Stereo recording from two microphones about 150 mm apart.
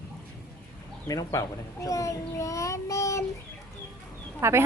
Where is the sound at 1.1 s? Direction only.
25° left (ahead or behind).